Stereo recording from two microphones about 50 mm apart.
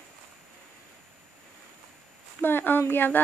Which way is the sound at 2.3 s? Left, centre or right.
Left.